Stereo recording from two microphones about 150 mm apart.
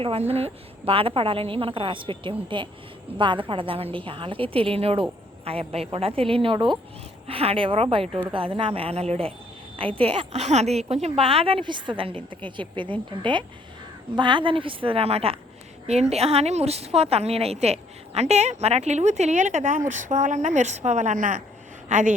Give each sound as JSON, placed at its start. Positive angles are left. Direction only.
{"t": 0.0, "sound": "a woman's voice", "side_deg": -40}